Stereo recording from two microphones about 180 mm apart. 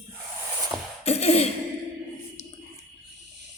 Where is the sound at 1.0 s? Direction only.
35° left (ahead or behind).